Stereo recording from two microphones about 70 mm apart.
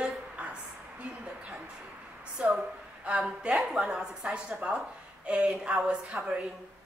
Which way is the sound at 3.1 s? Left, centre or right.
Centre.